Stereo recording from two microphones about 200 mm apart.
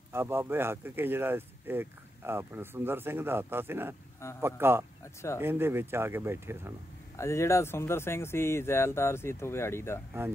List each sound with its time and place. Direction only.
0.1 s speech: 10° right (ahead or behind)
7.2 s speech: 15° left (ahead or behind)